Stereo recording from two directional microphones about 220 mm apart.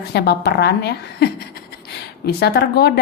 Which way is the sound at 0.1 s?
50° left (ahead or behind).